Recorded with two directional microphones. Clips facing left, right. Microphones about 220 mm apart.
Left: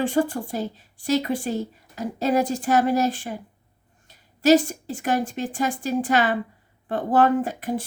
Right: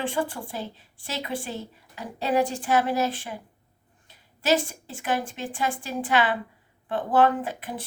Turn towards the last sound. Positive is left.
turn(degrees=40)  # may be behind; listen again after turning